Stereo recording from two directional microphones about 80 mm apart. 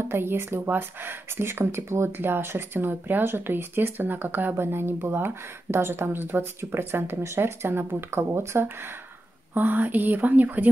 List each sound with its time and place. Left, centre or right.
0.0 s speech: right